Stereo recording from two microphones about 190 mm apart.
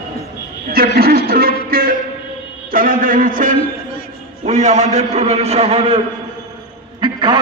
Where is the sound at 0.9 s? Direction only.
55° right (ahead or behind).